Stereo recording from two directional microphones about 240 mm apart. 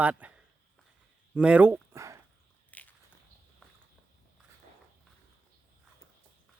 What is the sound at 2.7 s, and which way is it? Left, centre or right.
Biting, centre.